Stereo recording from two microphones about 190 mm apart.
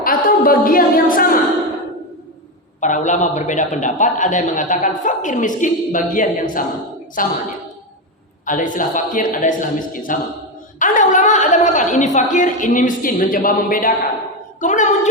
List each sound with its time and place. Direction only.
0.0 s a woman's voice: 50° left (ahead or behind)
2.8 s a man's voice: 40° left (ahead or behind)
8.4 s a man's voice: 45° left (ahead or behind)